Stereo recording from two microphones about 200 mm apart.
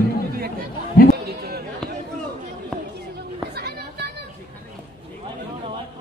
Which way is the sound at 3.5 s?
55° right (ahead or behind).